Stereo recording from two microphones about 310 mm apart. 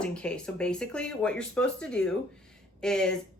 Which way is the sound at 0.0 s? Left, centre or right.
Centre.